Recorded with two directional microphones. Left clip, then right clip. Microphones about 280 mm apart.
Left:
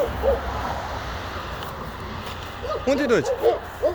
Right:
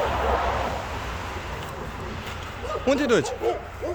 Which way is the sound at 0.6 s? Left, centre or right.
Centre.